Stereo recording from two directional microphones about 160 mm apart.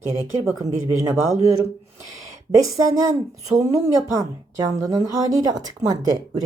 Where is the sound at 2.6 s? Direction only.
20° right (ahead or behind).